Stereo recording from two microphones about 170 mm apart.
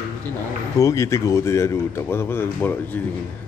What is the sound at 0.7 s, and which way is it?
A man's voice, 20° left (ahead or behind).